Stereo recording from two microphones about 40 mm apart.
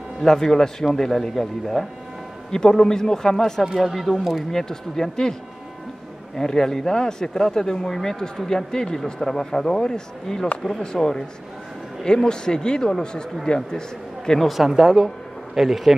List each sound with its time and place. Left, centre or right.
0.2 s speech: centre
2.5 s speech: centre
3.6 s speech: centre
4.5 s speech: centre
12.3 s a man's voice: centre
14.5 s speech: centre